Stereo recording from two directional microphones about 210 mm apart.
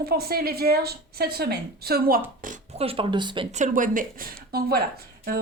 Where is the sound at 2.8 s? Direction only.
25° right (ahead or behind).